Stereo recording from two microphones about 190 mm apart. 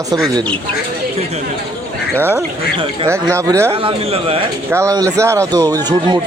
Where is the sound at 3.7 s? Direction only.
30° right (ahead or behind).